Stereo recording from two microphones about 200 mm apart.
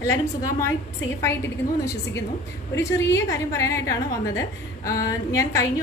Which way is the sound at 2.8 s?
15° left (ahead or behind).